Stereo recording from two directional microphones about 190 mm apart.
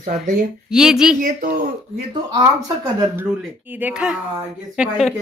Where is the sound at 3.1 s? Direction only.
5° right (ahead or behind).